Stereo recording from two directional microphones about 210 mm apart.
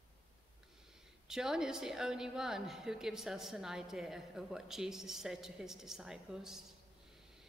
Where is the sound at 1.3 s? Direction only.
5° right (ahead or behind).